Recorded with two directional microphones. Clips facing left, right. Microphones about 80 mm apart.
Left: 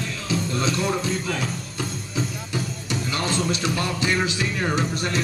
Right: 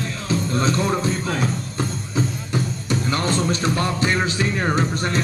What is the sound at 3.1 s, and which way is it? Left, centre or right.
Music, right.